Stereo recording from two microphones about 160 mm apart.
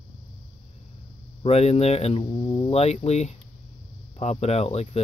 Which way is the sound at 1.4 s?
40° left (ahead or behind).